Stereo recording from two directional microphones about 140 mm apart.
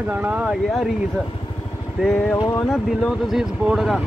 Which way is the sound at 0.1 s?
10° right (ahead or behind).